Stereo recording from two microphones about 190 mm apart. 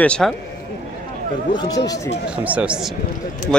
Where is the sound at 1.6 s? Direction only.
20° left (ahead or behind).